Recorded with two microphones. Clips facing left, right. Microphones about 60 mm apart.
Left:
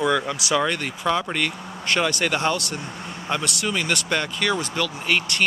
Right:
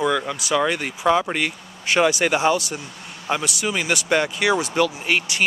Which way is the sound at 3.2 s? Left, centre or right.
Centre.